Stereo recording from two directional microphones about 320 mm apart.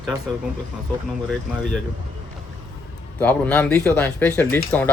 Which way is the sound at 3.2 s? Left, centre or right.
Centre.